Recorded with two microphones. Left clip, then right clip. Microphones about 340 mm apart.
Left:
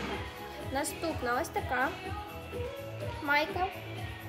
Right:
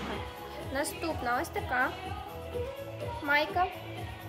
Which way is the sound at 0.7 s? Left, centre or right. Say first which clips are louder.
Right 1 dB; centre.